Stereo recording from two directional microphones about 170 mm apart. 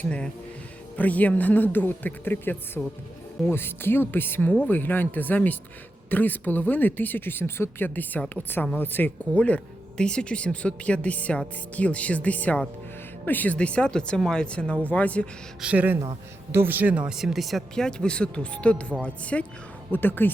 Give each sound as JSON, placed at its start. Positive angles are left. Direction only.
{"t": 0.0, "sound": "speech", "side_deg": 5}
{"t": 15.6, "sound": "speech", "side_deg": -10}